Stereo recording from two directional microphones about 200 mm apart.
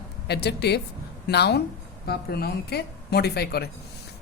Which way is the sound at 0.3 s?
55° left (ahead or behind).